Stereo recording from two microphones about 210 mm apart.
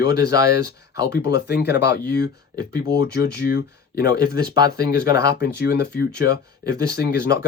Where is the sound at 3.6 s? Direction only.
50° left (ahead or behind).